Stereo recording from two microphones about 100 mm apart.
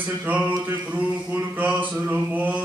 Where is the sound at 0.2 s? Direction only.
15° right (ahead or behind).